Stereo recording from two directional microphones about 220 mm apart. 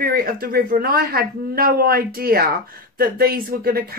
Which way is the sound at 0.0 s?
40° right (ahead or behind).